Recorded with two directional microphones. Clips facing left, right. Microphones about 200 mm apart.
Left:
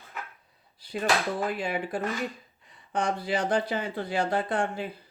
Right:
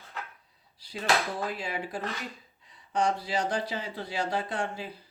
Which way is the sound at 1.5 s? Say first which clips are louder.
Left 4 dB; 50° left (ahead or behind).